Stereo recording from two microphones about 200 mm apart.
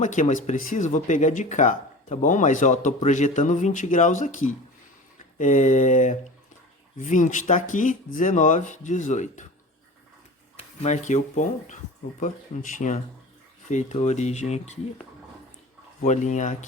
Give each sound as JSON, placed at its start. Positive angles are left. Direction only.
{"t": 0.0, "sound": "speech", "side_deg": 40}
{"t": 10.8, "sound": "speech", "side_deg": 35}
{"t": 12.8, "sound": "speech", "side_deg": 35}
{"t": 16.0, "sound": "speech", "side_deg": 35}